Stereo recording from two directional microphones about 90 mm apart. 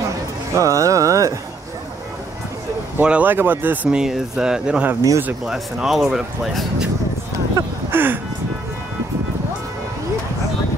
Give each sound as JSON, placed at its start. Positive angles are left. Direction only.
{"t": 0.6, "sound": "speech", "side_deg": -40}
{"t": 3.0, "sound": "speech", "side_deg": -15}
{"t": 4.0, "sound": "speech", "side_deg": -5}
{"t": 7.6, "sound": "a sound", "side_deg": -30}
{"t": 7.9, "sound": "speech", "side_deg": -25}